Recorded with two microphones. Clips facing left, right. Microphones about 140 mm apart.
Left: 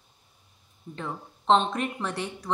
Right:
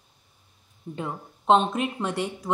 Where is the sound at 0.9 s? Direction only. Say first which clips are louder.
Right 2 dB; 10° right (ahead or behind).